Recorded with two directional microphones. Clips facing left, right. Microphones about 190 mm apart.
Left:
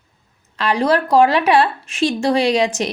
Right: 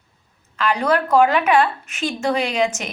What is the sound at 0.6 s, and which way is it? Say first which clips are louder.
Speech: left 2 dB; 35° left (ahead or behind).